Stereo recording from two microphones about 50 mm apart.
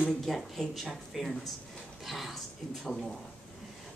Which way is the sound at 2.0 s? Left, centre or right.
Centre.